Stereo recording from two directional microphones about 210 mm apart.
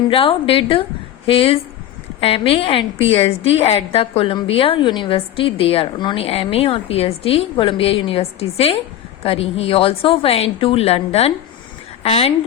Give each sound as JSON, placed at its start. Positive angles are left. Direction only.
{"t": 0.1, "sound": "a woman's voice", "side_deg": 25}